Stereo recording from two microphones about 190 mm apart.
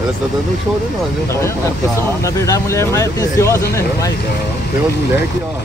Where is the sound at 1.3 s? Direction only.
15° left (ahead or behind).